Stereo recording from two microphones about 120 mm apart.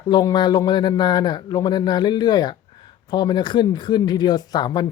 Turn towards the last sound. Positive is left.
turn(degrees=35)  # may be behind; listen again after turning